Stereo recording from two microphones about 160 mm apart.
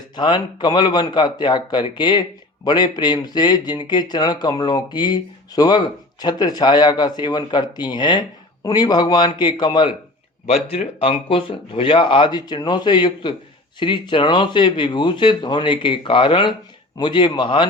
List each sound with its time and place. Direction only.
0.2 s speech: 25° left (ahead or behind)